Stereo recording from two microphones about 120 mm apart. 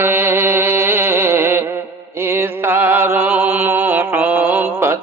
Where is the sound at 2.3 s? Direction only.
20° right (ahead or behind).